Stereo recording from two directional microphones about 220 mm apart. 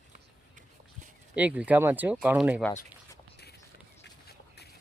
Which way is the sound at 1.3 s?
5° right (ahead or behind).